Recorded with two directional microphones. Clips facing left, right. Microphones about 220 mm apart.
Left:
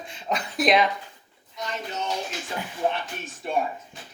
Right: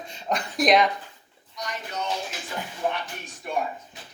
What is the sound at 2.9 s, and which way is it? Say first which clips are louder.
Speech: left 1 dB; 25° left (ahead or behind).